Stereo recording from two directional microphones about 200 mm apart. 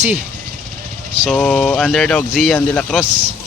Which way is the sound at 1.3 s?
5° left (ahead or behind).